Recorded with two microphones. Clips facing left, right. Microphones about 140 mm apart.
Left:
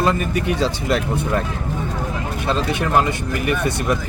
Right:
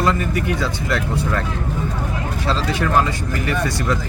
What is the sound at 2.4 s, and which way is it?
Speech, 20° left (ahead or behind).